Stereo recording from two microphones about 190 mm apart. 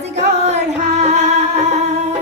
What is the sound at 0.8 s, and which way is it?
Music, 35° right (ahead or behind).